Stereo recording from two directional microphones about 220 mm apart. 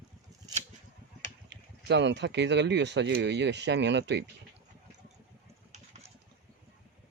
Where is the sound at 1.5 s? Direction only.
55° right (ahead or behind).